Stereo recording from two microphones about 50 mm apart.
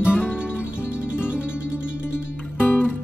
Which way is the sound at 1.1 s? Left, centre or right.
Right.